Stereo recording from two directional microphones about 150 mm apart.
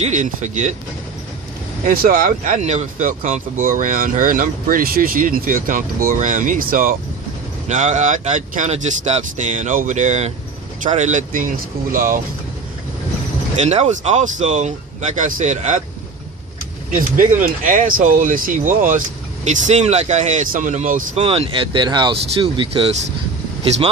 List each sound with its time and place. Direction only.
0.0 s speech: 55° right (ahead or behind)
1.8 s speech: 70° right (ahead or behind)
7.7 s speech: 55° right (ahead or behind)
13.6 s speech: 45° right (ahead or behind)
16.9 s speech: 60° right (ahead or behind)
19.5 s speech: 50° right (ahead or behind)
21.2 s speech: 40° right (ahead or behind)